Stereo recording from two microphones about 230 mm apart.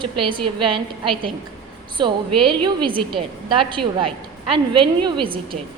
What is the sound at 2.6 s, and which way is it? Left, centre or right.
A woman's voice, right.